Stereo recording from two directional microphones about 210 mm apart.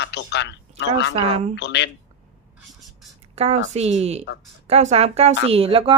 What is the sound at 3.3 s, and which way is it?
A woman's voice, 30° right (ahead or behind).